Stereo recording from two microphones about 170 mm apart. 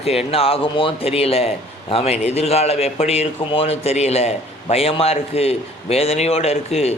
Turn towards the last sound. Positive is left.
turn(degrees=40)  # may be behind; listen again after turning